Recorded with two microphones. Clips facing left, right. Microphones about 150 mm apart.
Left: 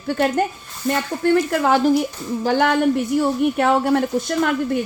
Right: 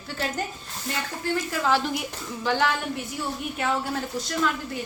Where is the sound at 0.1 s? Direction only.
55° left (ahead or behind).